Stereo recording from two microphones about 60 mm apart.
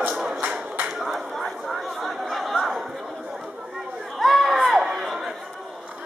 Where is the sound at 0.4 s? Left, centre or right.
Right.